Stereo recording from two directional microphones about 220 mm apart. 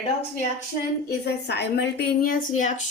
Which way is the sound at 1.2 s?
50° left (ahead or behind).